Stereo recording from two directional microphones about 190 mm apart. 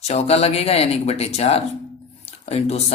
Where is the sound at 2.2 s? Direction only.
35° left (ahead or behind).